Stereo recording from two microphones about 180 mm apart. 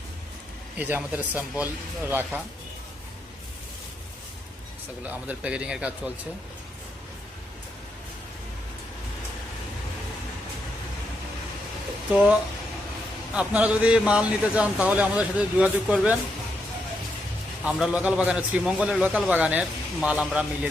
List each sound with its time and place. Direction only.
0.8 s a man's voice: 10° right (ahead or behind)
5.0 s a man's voice: 10° right (ahead or behind)
13.3 s a man's voice: 5° right (ahead or behind)
17.6 s a man's voice: 5° right (ahead or behind)